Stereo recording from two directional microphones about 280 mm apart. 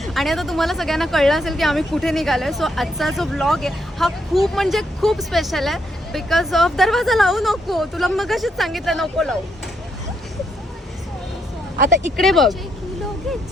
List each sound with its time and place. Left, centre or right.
0.0 s speech: centre
11.8 s speech: right
12.1 s speech: centre